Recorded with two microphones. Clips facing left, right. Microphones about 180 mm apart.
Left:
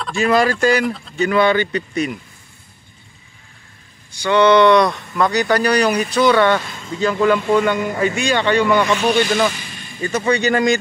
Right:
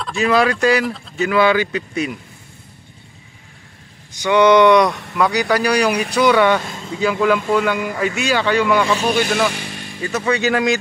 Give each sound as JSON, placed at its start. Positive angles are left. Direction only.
{"t": 0.0, "sound": "speech", "side_deg": 0}
{"t": 4.2, "sound": "speech", "side_deg": -15}
{"t": 9.5, "sound": "a sound", "side_deg": -65}
{"t": 10.0, "sound": "speech", "side_deg": -5}